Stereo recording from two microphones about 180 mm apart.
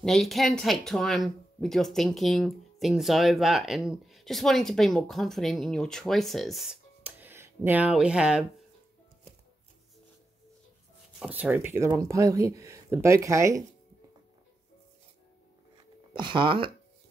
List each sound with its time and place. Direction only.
0.0 s speech: centre (ahead or behind)
11.1 s speech: 10° right (ahead or behind)
16.1 s speech: 25° right (ahead or behind)